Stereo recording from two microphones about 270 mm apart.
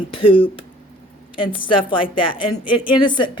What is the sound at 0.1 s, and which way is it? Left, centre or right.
Speech, centre.